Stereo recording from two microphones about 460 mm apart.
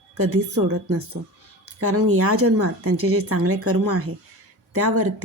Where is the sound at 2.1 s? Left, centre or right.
Right.